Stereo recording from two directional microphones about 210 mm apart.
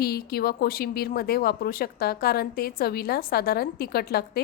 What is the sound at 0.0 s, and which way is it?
Speech, 50° left (ahead or behind).